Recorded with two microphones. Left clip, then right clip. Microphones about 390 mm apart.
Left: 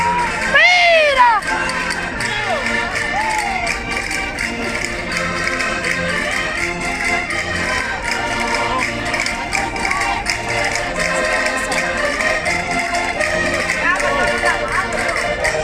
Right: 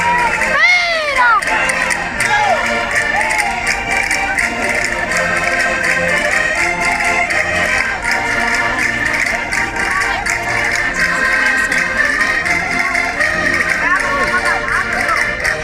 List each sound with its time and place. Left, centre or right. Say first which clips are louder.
0.6 s cat: left 3 dB; centre